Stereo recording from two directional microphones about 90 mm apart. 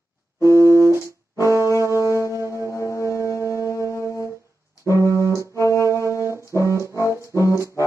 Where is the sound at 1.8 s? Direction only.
35° right (ahead or behind).